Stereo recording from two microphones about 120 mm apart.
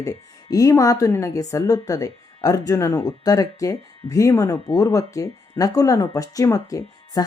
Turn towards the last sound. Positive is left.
turn(degrees=30)  # may be behind; listen again after turning